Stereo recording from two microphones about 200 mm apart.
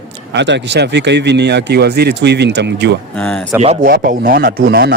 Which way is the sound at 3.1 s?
5° left (ahead or behind).